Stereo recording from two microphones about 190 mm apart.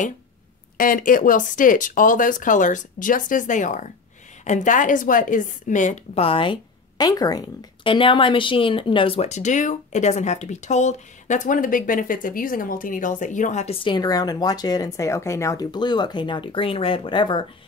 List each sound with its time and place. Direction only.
0.7 s a woman's voice: 45° left (ahead or behind)
13.8 s speech: 20° left (ahead or behind)